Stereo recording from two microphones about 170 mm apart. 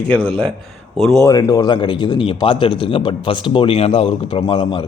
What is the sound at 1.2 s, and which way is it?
A man's voice, 20° left (ahead or behind).